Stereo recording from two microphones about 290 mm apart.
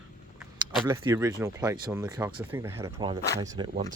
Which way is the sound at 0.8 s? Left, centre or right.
Centre.